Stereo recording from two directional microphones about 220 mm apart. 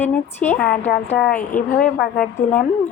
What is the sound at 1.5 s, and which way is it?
Speech, 45° left (ahead or behind).